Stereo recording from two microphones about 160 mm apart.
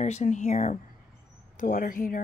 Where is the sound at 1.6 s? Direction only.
55° left (ahead or behind).